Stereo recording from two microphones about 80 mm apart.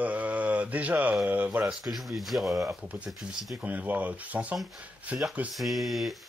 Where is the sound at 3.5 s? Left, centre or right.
Centre.